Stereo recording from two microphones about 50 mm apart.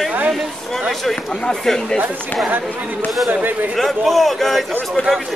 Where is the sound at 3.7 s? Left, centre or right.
Centre.